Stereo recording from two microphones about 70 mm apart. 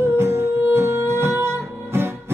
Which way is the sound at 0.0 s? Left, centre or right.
Right.